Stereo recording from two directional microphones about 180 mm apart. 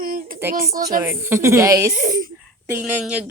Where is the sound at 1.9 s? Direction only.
45° right (ahead or behind).